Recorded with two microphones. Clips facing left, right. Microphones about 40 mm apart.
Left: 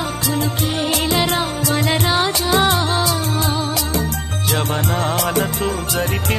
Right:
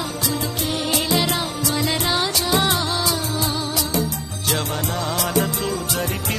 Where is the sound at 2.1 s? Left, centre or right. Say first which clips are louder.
Left 3 dB; left.